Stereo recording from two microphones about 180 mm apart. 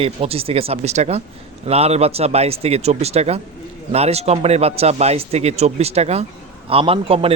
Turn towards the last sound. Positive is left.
turn(degrees=-30)  # may be behind; listen again after turning